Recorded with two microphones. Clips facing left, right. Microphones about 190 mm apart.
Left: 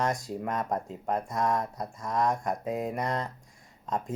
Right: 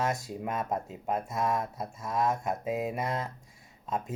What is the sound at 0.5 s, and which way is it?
Speech, 5° right (ahead or behind).